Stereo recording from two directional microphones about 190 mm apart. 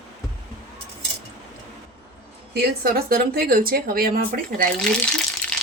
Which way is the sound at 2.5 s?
55° right (ahead or behind).